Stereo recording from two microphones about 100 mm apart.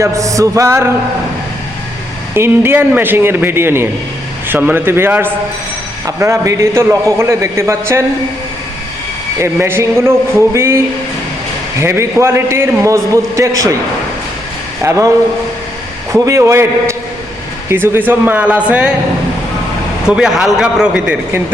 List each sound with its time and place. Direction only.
0.0 s music: 30° right (ahead or behind)
2.3 s a man's voice: 25° right (ahead or behind)
9.4 s a man's voice: 25° right (ahead or behind)
14.8 s a man's voice: 30° right (ahead or behind)
16.1 s a man's voice: 30° right (ahead or behind); by 18.9 s 10° right (ahead or behind)
20.1 s a man's voice: 10° right (ahead or behind)